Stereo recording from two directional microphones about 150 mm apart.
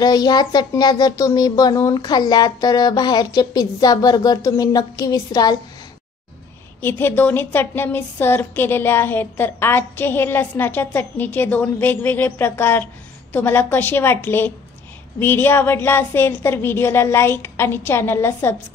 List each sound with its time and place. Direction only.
0.0 s speech: 25° left (ahead or behind)
6.8 s a woman's voice: 15° left (ahead or behind)